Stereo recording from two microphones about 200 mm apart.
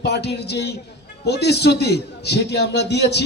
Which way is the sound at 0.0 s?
55° left (ahead or behind).